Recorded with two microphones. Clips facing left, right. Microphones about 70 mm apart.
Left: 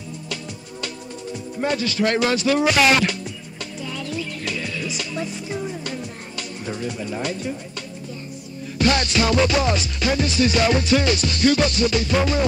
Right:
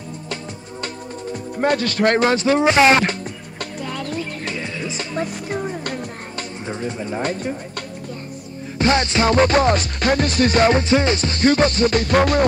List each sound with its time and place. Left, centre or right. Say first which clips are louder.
0.3 s music: right 3 dB; right
1.6 s music: right 4 dB; right
3.5 s music: right 4 dB; right
4.6 s music: right 1 dB; right
5.1 s music: right 3 dB; right
6.6 s music: right 1 dB; right
8.7 s music: right 2 dB; right